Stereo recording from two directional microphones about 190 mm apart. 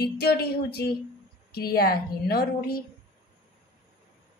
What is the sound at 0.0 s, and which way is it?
A woman's voice, 55° left (ahead or behind).